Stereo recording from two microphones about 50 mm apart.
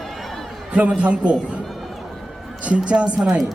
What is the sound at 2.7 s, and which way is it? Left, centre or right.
Speech, right.